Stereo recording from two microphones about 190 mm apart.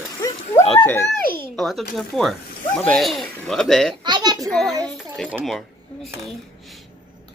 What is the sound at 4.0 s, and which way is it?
Children playing, 20° right (ahead or behind).